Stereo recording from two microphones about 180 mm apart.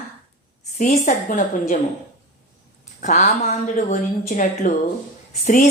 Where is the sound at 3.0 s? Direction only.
40° left (ahead or behind).